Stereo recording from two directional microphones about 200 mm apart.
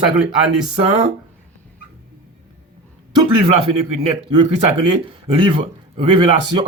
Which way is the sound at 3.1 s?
25° right (ahead or behind).